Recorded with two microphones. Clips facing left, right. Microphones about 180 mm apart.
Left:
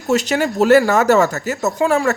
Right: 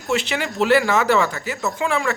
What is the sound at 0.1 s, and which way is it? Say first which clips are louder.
Speech: left 6 dB; 40° left (ahead or behind).